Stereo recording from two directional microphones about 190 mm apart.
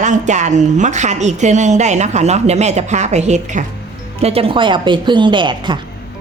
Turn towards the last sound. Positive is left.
turn(degrees=-25)  # may be behind; listen again after turning